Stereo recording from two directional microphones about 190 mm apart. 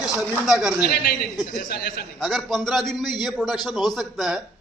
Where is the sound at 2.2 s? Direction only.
Centre (ahead or behind).